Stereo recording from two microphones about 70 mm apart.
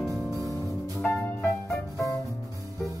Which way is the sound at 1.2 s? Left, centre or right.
Left.